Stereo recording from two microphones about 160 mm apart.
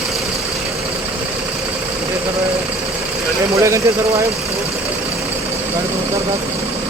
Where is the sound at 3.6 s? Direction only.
20° right (ahead or behind).